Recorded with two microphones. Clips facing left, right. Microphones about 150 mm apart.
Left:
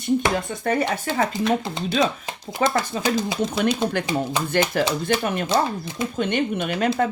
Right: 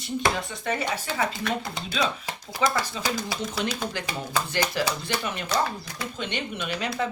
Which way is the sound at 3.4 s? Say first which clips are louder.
Left 8 dB; 55° left (ahead or behind).